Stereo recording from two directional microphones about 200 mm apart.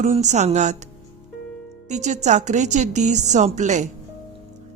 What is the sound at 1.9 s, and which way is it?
A woman's voice, 35° right (ahead or behind).